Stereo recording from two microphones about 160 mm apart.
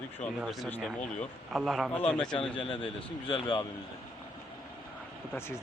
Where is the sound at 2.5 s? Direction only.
35° left (ahead or behind).